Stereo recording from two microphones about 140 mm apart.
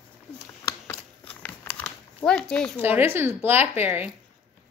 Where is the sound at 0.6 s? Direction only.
15° left (ahead or behind).